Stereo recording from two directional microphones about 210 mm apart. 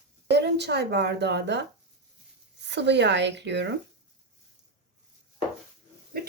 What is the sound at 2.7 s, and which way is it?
Speech, 55° right (ahead or behind).